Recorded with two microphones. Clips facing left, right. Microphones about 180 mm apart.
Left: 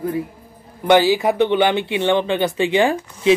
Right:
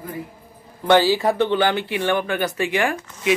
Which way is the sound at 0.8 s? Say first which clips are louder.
Left 2 dB; 15° left (ahead or behind).